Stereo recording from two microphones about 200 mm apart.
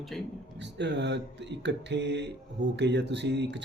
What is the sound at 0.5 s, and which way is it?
Speech, 60° right (ahead or behind).